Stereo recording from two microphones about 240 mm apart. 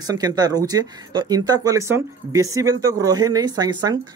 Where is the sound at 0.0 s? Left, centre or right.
Centre.